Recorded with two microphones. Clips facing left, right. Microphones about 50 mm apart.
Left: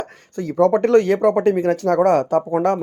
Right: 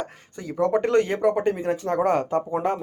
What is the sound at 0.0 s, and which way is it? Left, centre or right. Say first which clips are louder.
Speech: left 6 dB; left.